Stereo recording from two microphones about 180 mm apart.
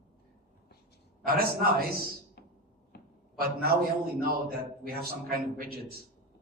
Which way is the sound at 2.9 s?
65° left (ahead or behind).